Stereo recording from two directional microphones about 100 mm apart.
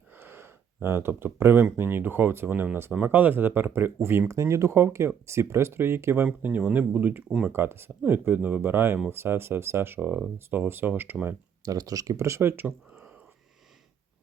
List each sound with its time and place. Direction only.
0.2 s a sound: 25° right (ahead or behind)
1.7 s speech: 20° right (ahead or behind)
11.6 s speech: 40° right (ahead or behind); by 13.1 s 15° right (ahead or behind)